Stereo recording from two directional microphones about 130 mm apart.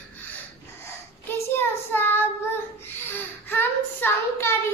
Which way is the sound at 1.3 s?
15° left (ahead or behind).